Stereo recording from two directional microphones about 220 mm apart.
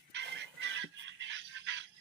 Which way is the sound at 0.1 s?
55° right (ahead or behind).